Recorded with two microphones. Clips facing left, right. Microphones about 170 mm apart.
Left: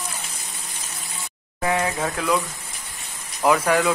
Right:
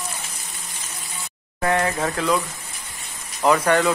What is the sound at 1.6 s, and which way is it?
Speech, 5° left (ahead or behind).